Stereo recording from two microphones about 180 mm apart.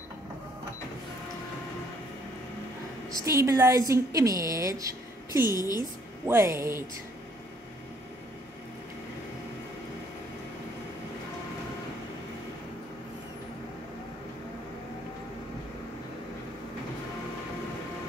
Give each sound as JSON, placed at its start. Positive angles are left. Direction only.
{"t": 3.2, "sound": "a woman's voice", "side_deg": -20}
{"t": 5.5, "sound": "a woman's voice", "side_deg": 20}
{"t": 5.8, "sound": "a woman's voice", "side_deg": -15}